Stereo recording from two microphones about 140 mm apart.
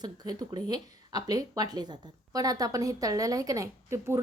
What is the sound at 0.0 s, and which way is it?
Speech, 30° right (ahead or behind).